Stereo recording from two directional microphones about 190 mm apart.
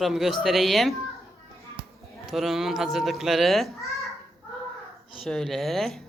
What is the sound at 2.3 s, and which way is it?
A woman's voice, centre (ahead or behind).